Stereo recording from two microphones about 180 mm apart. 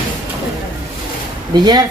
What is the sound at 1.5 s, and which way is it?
Speech, 25° right (ahead or behind).